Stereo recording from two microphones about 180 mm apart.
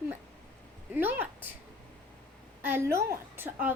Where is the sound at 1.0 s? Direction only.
10° right (ahead or behind).